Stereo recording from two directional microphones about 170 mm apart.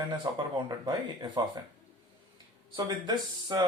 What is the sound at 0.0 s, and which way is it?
Speech, 25° right (ahead or behind).